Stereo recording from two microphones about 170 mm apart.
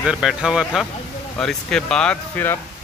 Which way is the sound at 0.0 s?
5° right (ahead or behind).